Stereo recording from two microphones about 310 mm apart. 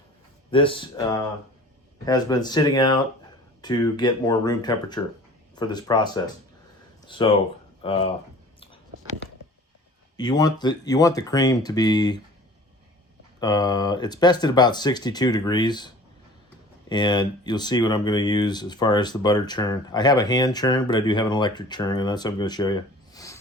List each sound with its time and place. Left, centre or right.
0.5 s speech: centre
2.0 s speech: centre
10.2 s speech: centre
13.4 s speech: centre
16.9 s speech: centre